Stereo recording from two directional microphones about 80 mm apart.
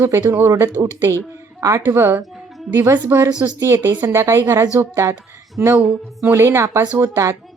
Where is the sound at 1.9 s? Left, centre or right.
Right.